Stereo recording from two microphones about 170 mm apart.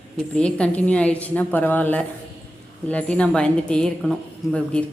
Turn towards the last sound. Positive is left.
turn(degrees=5)  # may be behind; listen again after turning